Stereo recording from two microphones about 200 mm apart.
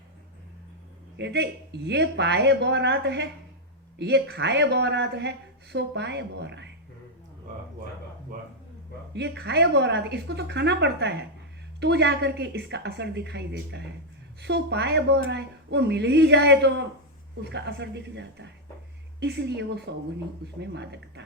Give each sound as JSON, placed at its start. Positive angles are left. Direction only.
{"t": 1.2, "sound": "a woman's voice", "side_deg": -55}
{"t": 9.1, "sound": "a woman's voice", "side_deg": -60}